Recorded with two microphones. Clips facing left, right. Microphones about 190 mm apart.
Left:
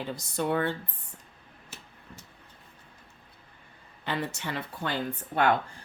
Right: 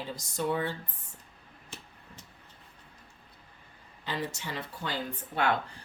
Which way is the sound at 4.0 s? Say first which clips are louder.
Left 3 dB; 60° left (ahead or behind).